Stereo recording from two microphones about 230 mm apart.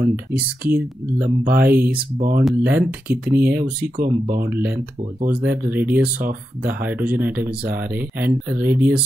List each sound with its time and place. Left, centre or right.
0.1 s speech: centre
1.2 s speech: right
1.6 s speech: centre
2.1 s speech: right
2.4 s speech: centre
3.9 s speech: right
4.5 s speech: centre
6.1 s speech: right
6.7 s speech: centre